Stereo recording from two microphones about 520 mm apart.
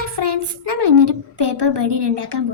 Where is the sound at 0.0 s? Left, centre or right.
Right.